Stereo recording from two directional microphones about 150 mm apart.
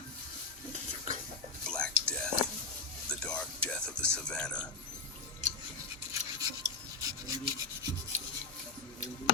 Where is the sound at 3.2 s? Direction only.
5° left (ahead or behind).